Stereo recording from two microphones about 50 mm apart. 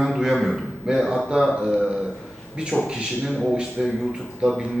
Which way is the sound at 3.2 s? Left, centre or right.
Centre.